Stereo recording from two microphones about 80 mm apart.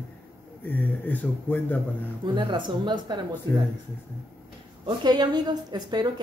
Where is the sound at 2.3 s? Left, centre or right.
Right.